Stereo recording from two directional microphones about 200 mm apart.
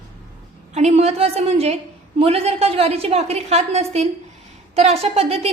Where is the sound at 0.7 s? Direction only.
35° right (ahead or behind).